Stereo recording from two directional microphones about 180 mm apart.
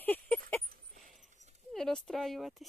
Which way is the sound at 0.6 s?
45° right (ahead or behind).